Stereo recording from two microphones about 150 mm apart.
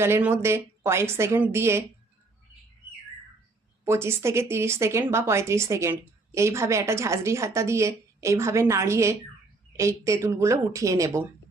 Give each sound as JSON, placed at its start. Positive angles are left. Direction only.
{"t": 0.0, "sound": "a woman's voice", "side_deg": -15}
{"t": 3.8, "sound": "speech", "side_deg": -15}